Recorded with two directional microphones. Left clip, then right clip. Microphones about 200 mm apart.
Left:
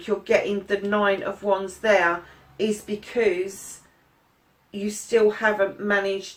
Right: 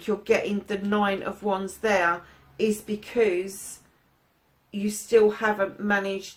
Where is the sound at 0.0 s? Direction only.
45° right (ahead or behind).